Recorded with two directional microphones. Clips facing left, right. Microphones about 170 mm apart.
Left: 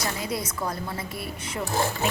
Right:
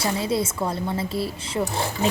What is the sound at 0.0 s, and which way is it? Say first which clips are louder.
A woman's voice: right 6 dB; 30° right (ahead or behind).